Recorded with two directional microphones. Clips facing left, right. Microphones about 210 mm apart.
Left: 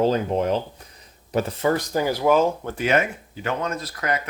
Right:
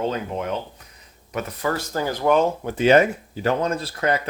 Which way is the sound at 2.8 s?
35° right (ahead or behind).